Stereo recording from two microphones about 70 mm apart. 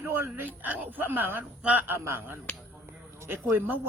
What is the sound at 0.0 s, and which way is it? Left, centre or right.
A man's voice, right.